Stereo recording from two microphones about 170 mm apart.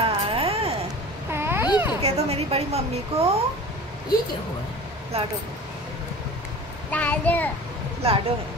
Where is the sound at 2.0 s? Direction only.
35° right (ahead or behind).